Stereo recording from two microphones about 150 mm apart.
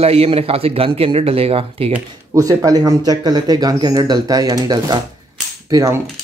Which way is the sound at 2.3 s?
25° right (ahead or behind).